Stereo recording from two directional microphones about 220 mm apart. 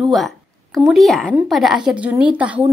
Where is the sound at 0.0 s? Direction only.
Centre (ahead or behind).